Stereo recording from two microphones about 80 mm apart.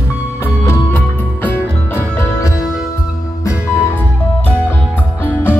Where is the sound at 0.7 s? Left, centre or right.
Left.